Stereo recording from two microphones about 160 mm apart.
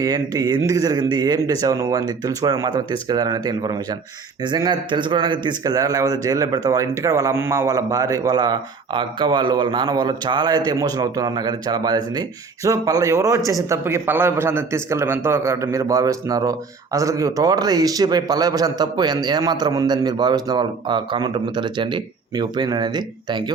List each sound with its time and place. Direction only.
0.0 s a man's voice: 25° right (ahead or behind)